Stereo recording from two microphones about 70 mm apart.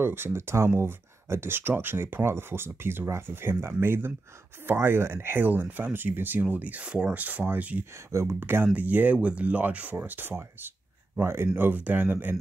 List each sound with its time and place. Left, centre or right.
0.0 s speech: right
8.1 s speech: right